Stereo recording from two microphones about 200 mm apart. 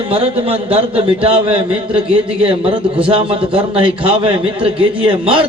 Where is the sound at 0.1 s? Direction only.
30° right (ahead or behind).